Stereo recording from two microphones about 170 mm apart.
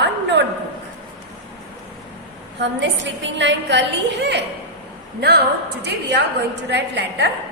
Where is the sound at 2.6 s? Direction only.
90° right.